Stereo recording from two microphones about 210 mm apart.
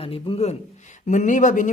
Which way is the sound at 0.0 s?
25° left (ahead or behind).